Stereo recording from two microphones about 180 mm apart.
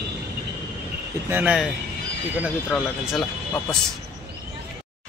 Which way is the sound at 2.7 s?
Centre (ahead or behind).